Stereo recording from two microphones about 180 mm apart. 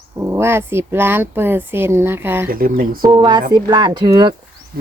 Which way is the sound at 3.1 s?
25° right (ahead or behind).